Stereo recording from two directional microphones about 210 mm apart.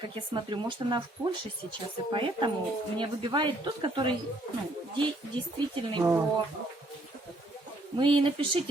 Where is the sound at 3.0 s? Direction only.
25° right (ahead or behind).